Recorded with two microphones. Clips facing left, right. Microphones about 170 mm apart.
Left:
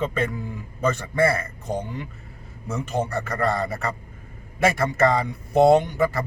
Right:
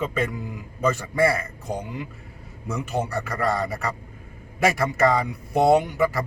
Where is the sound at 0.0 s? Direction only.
Centre (ahead or behind).